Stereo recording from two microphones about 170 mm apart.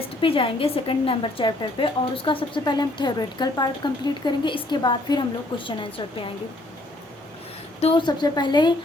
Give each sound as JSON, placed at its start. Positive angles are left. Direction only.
{"t": 0.2, "sound": "a woman's voice", "side_deg": 30}
{"t": 7.8, "sound": "a woman's voice", "side_deg": 30}